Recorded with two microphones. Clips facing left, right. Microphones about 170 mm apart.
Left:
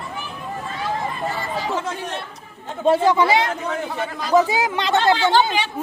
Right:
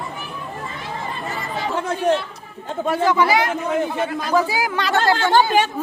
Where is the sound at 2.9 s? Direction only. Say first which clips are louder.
Left 2 dB; 25° left (ahead or behind).